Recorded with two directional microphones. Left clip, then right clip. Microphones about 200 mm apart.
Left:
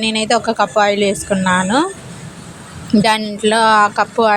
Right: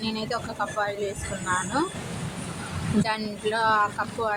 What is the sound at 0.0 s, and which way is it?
Speech, 40° left (ahead or behind).